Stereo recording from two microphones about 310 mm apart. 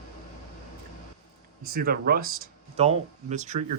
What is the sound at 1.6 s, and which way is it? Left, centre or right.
Speech, right.